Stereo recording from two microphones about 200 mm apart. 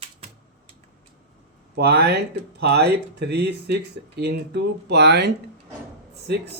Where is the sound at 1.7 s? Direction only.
55° right (ahead or behind).